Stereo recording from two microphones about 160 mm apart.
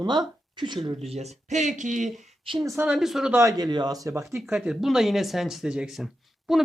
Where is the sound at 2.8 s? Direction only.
5° right (ahead or behind).